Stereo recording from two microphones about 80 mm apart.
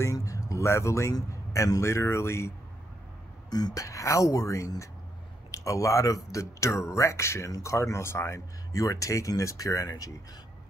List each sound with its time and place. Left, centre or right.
0.0 s speech: left
3.4 s speech: left
3.8 s speech: left